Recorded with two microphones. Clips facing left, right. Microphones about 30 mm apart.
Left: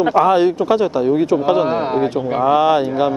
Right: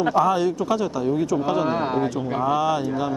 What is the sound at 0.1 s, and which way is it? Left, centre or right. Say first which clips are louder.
Speech: left 7 dB; left.